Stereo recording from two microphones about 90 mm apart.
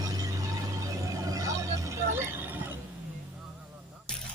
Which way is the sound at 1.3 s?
40° right (ahead or behind).